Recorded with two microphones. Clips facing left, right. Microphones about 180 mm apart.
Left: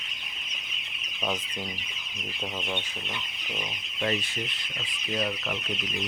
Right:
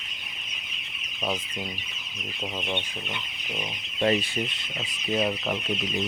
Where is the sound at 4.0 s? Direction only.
35° right (ahead or behind).